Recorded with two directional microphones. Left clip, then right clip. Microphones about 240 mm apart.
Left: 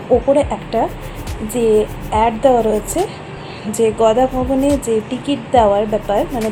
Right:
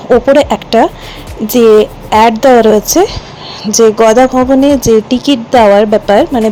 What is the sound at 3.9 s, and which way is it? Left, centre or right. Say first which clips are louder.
Speech: right 8 dB; right.